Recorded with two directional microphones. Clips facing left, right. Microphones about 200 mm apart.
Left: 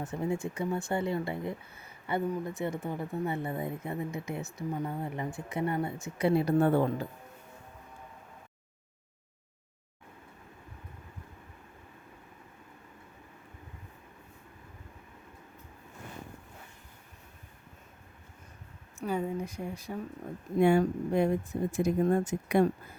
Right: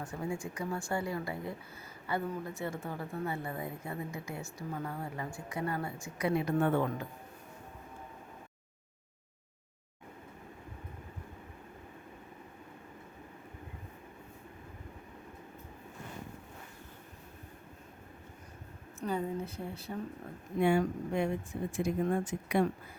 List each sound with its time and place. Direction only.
0.0 s speech: 20° left (ahead or behind)
19.0 s a sound: 10° left (ahead or behind)
20.6 s speech: 40° left (ahead or behind)